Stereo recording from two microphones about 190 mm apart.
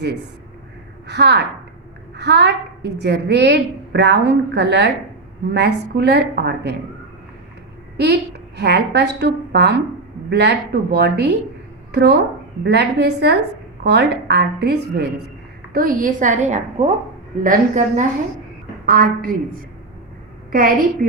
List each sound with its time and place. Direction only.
1.0 s a woman's voice: 60° right (ahead or behind)
7.9 s a woman's voice: 60° right (ahead or behind)
15.7 s a woman's voice: 50° right (ahead or behind)
20.5 s a woman's voice: 50° right (ahead or behind)